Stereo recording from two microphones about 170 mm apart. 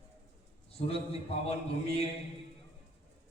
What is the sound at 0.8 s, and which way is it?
Speech, 40° left (ahead or behind).